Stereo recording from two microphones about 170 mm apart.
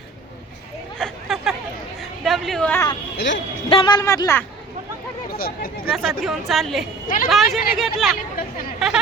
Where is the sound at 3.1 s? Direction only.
90° left.